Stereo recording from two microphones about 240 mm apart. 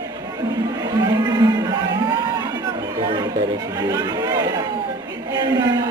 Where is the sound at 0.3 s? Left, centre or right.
Centre.